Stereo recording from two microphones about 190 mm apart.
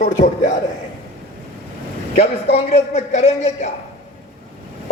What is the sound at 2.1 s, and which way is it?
A man's voice, 30° left (ahead or behind).